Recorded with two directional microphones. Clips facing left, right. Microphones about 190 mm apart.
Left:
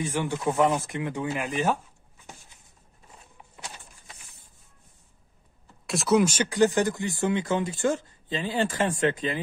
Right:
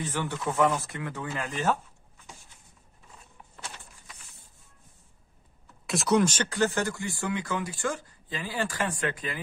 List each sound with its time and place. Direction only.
0.0 s speech: 10° left (ahead or behind)
5.9 s speech: centre (ahead or behind); by 9.4 s 25° left (ahead or behind)